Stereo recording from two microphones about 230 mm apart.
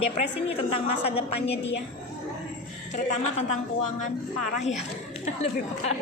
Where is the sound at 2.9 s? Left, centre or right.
Left.